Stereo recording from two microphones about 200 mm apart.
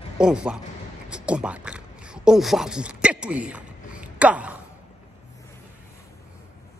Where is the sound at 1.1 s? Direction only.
5° right (ahead or behind).